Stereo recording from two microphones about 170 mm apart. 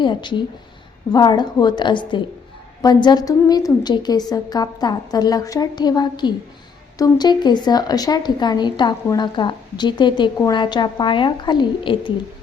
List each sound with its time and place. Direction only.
0.0 s a woman's voice: 25° left (ahead or behind)